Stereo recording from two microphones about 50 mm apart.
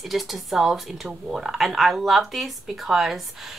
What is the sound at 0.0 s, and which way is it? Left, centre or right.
A woman's voice, centre.